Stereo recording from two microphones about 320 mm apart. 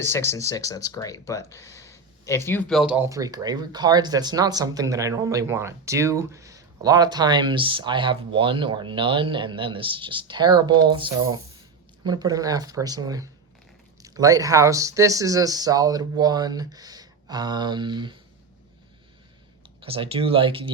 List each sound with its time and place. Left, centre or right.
0.0 s speech: centre
19.8 s speech: centre